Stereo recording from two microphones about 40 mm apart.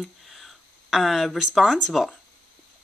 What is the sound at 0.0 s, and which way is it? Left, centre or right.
Speech, centre.